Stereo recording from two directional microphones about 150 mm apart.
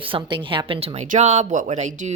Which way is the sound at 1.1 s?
50° right (ahead or behind).